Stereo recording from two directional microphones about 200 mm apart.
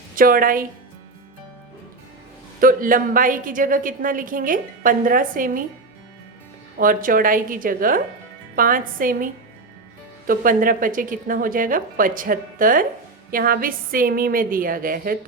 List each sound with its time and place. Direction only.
0.2 s a woman's voice: 45° right (ahead or behind)
2.6 s a woman's voice: 45° right (ahead or behind)
6.7 s a woman's voice: 45° right (ahead or behind)